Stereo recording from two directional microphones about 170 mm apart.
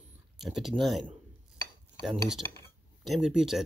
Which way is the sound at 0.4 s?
Centre (ahead or behind).